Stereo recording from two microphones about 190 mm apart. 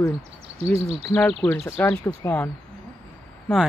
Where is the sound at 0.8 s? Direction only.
30° right (ahead or behind).